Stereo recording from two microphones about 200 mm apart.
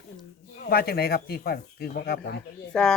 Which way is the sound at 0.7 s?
50° left (ahead or behind).